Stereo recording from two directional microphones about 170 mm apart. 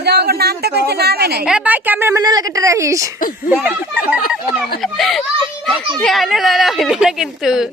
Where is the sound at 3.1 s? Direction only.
55° left (ahead or behind).